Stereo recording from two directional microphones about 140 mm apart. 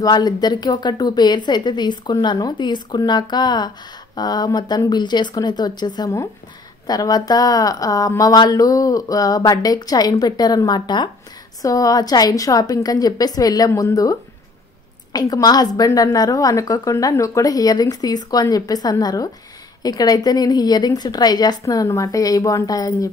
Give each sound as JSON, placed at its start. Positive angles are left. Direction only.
{"t": 0.0, "sound": "speech", "side_deg": 30}
{"t": 15.1, "sound": "speech", "side_deg": 30}